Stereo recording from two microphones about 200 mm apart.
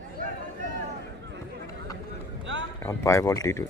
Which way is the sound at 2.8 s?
15° left (ahead or behind).